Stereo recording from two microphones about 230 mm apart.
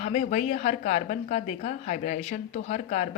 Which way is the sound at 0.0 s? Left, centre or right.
Left.